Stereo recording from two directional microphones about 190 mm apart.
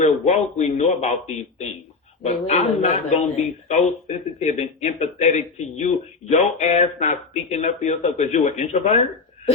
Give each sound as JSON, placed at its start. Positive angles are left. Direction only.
{"t": 0.0, "sound": "speech", "side_deg": 35}